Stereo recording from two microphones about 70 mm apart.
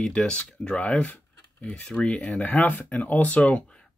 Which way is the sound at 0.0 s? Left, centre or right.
Centre.